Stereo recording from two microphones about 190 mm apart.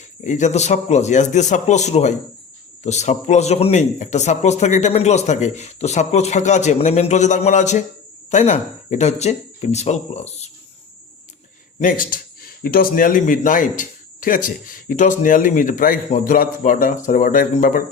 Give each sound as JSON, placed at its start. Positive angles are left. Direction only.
{"t": 0.3, "sound": "a man's voice", "side_deg": 40}
{"t": 11.8, "sound": "speech", "side_deg": 45}